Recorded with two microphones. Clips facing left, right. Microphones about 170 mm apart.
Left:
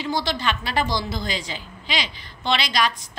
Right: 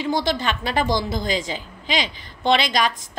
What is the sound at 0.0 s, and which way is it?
A woman's voice, 50° right (ahead or behind).